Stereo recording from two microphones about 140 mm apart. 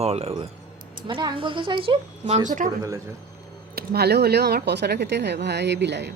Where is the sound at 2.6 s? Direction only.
70° right (ahead or behind).